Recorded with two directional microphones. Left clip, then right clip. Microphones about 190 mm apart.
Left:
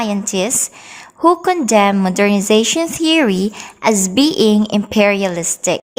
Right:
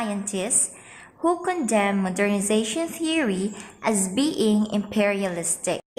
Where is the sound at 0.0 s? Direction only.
45° left (ahead or behind).